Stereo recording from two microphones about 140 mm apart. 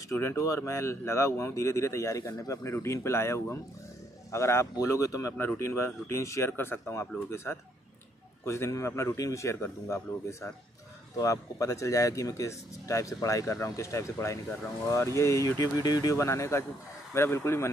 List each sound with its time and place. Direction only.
0.1 s speech: 20° left (ahead or behind)